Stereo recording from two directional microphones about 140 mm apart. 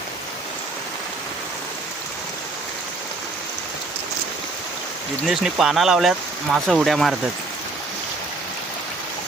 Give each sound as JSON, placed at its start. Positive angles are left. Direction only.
{"t": 5.2, "sound": "speech", "side_deg": -5}